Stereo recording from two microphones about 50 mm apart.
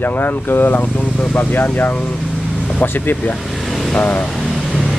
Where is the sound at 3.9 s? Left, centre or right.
Left.